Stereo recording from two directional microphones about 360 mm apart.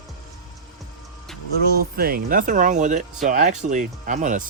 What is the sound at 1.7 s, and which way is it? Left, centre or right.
Speech, right.